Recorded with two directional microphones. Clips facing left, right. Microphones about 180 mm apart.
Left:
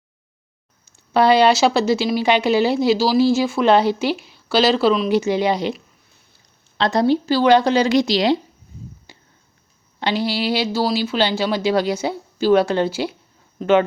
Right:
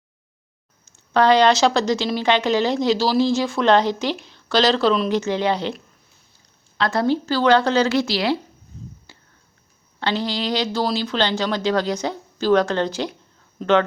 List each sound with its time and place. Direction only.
0.9 s speech: 10° left (ahead or behind)
6.7 s speech: 20° left (ahead or behind)
9.1 s a sound: 15° left (ahead or behind)
10.0 s speech: 10° left (ahead or behind)